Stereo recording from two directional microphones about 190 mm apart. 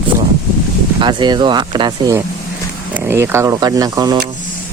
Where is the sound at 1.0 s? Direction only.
25° right (ahead or behind).